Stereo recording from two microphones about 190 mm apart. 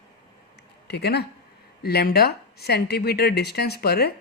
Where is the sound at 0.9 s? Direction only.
60° left (ahead or behind).